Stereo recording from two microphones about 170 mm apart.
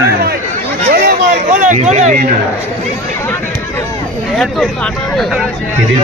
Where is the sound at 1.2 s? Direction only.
50° right (ahead or behind).